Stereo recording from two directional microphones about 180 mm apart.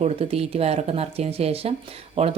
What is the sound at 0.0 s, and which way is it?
A woman's voice, 35° right (ahead or behind).